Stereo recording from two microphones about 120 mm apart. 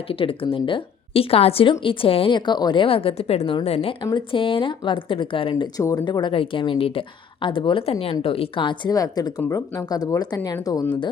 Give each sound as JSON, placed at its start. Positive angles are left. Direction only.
{"t": 0.1, "sound": "a woman's voice", "side_deg": 50}
{"t": 4.0, "sound": "a woman's voice", "side_deg": 45}
{"t": 5.7, "sound": "a woman's voice", "side_deg": 30}